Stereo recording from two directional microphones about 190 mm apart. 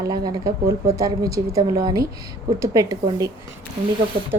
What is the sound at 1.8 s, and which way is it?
A woman's voice, 20° right (ahead or behind).